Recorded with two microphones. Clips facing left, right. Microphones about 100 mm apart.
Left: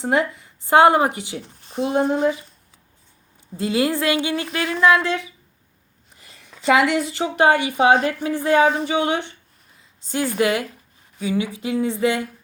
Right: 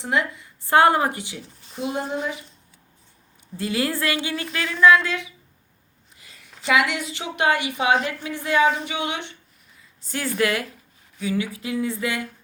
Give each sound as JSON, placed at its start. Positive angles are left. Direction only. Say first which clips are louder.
{"t": 0.0, "sound": "a woman's voice", "louder": "left 4 dB", "side_deg": 35}
{"t": 0.6, "sound": "speech", "louder": "left 3 dB", "side_deg": 20}
{"t": 2.0, "sound": "a woman's voice", "louder": "left 8 dB", "side_deg": 30}
{"t": 3.6, "sound": "a woman's voice", "louder": "left 4 dB", "side_deg": 20}
{"t": 10.1, "sound": "speech", "louder": "left 3 dB", "side_deg": 20}